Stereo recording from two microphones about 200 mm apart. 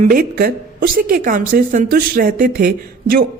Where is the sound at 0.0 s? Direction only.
45° right (ahead or behind).